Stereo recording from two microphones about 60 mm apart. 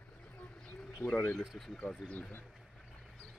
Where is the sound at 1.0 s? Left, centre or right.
Left.